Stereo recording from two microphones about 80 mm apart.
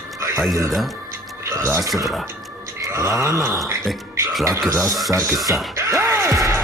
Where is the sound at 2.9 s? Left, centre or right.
Right.